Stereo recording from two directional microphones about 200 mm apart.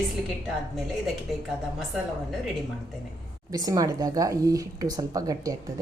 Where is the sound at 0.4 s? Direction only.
Centre (ahead or behind).